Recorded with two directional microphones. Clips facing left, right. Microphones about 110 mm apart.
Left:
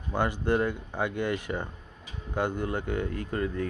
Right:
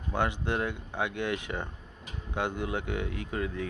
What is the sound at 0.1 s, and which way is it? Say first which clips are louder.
Speech: left 3 dB; 5° left (ahead or behind).